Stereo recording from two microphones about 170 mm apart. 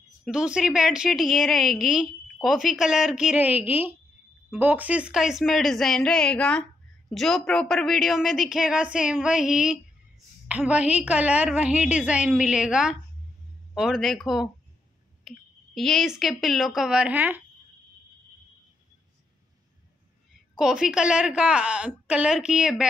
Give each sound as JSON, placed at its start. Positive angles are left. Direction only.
{"t": 0.2, "sound": "a woman's voice", "side_deg": -5}
{"t": 20.5, "sound": "a woman's voice", "side_deg": -5}